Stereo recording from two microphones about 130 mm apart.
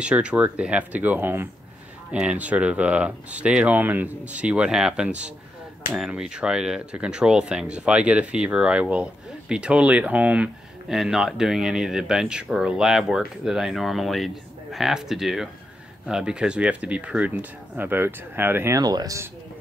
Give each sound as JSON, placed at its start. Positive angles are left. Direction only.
{"t": 0.0, "sound": "speech", "side_deg": -10}
{"t": 18.8, "sound": "speech", "side_deg": -30}